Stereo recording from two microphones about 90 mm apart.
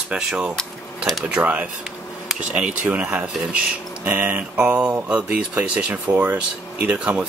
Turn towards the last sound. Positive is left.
turn(degrees=-15)  # may be behind; listen again after turning